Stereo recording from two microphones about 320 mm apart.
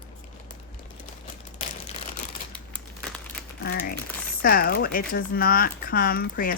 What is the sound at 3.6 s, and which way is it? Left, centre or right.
Speech, left.